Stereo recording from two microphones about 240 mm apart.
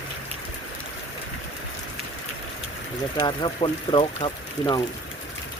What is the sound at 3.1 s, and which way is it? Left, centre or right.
Speech, left.